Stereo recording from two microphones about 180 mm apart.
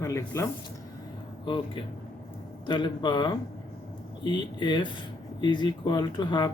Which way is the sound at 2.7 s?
25° left (ahead or behind).